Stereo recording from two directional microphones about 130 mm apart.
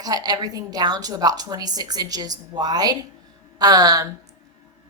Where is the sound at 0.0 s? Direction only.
30° right (ahead or behind).